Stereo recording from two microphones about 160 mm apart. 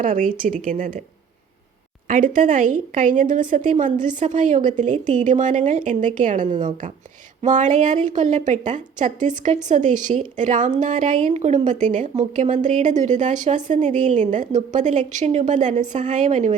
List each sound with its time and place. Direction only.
0.0 s a woman's voice: 55° right (ahead or behind)
2.0 s a woman's voice: 55° right (ahead or behind)